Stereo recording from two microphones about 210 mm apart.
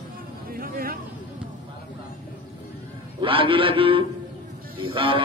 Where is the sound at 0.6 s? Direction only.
45° right (ahead or behind).